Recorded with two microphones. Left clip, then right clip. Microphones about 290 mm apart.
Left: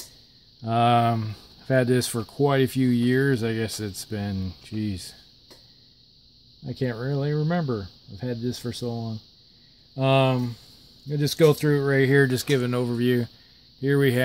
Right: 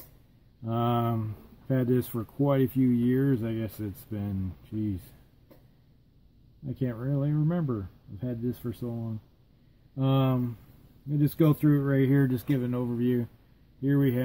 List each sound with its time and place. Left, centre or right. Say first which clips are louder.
0.7 s speech: left 9 dB; left
6.6 s speech: left 5 dB; left
9.9 s speech: left 7 dB; left